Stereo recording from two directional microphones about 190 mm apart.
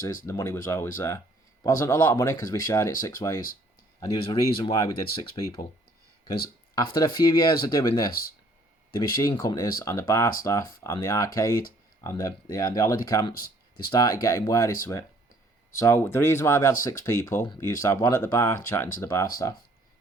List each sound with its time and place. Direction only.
0.3 s speech: 15° left (ahead or behind)
6.7 s speech: 20° left (ahead or behind)
13.3 s a sound: 50° left (ahead or behind)
13.9 s speech: 20° left (ahead or behind)